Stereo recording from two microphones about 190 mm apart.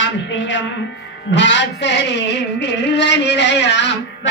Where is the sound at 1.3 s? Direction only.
70° left (ahead or behind).